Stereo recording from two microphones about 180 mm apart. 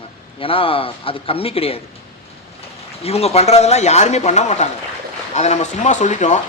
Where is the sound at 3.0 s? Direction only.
35° left (ahead or behind).